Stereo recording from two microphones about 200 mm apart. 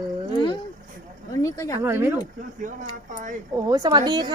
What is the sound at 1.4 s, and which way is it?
Speech, 15° left (ahead or behind).